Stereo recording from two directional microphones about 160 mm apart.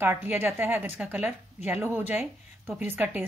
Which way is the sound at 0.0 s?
10° right (ahead or behind).